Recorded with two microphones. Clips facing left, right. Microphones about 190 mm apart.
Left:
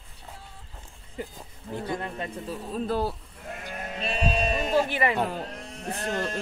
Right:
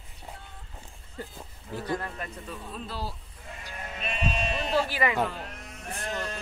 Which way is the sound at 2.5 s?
45° left (ahead or behind).